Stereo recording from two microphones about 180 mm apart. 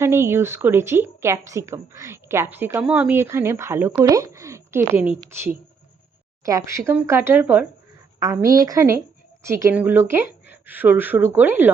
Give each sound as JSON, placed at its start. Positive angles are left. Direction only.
{"t": 0.0, "sound": "a woman's voice", "side_deg": -15}